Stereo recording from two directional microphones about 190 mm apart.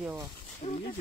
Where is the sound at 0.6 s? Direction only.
40° left (ahead or behind).